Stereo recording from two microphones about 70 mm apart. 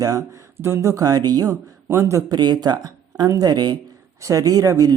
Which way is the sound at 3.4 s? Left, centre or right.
Right.